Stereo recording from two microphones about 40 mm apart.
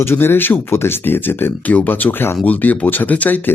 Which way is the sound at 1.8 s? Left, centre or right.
Left.